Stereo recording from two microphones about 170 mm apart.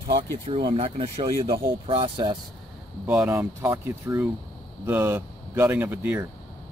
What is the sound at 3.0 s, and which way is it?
Speech, 10° right (ahead or behind).